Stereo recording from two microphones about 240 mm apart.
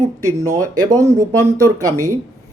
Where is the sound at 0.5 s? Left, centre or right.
Centre.